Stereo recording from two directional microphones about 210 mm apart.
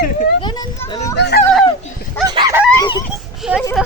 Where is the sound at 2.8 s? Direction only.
20° left (ahead or behind).